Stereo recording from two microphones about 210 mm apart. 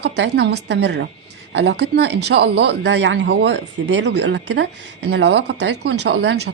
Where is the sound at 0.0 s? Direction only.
55° right (ahead or behind).